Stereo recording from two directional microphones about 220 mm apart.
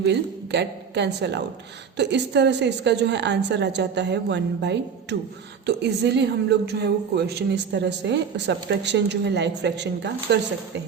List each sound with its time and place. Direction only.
0.0 s speech: 50° right (ahead or behind)